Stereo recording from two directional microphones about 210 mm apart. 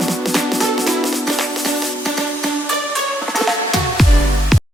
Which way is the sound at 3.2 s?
Centre (ahead or behind).